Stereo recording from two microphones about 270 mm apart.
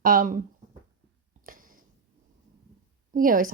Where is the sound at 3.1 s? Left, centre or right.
Right.